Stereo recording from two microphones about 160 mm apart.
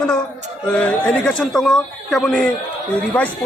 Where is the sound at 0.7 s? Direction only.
5° left (ahead or behind).